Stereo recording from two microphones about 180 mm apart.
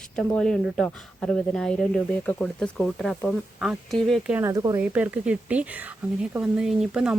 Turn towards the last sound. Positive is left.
turn(degrees=-5)  # may be behind; listen again after turning